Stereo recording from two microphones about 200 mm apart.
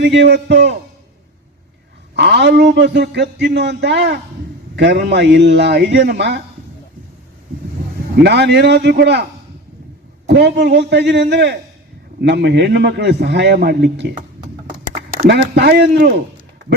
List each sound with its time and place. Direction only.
0.0 s speech: 60° right (ahead or behind)
2.1 s speech: 60° right (ahead or behind)
8.1 s speech: 55° right (ahead or behind)
10.2 s speech: 55° right (ahead or behind)
15.3 s speech: 55° right (ahead or behind)